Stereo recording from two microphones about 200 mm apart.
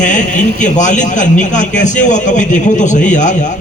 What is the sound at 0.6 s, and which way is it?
A man's voice, 40° left (ahead or behind).